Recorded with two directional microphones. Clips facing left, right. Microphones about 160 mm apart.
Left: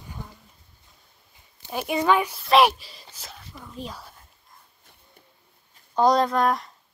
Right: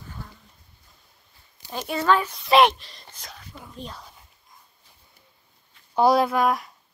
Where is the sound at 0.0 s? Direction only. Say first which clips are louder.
Left 1 dB; 15° left (ahead or behind).